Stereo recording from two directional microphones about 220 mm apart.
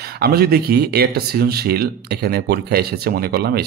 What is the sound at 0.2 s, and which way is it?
Speech, 45° right (ahead or behind).